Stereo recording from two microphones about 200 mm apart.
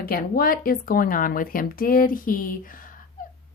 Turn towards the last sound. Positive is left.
turn(degrees=45)  # may be behind; listen again after turning